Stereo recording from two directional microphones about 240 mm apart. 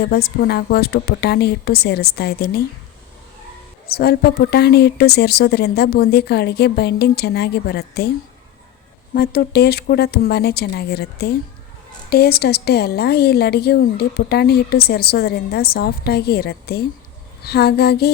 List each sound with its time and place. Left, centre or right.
0.0 s a woman's voice: left
3.8 s a woman's voice: left
9.1 s a woman's voice: left